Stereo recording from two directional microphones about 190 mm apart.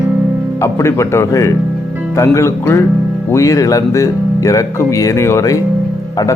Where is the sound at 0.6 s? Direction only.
15° left (ahead or behind).